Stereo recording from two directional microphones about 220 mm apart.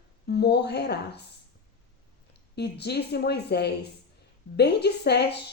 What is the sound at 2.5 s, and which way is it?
Speech, 50° left (ahead or behind).